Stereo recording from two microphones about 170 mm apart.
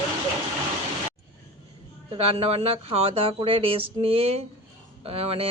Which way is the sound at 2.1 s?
35° right (ahead or behind).